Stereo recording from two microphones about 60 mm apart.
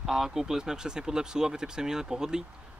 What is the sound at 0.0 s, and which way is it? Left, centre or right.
Speech, centre.